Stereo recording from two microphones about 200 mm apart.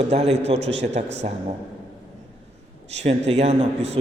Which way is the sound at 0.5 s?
60° right (ahead or behind).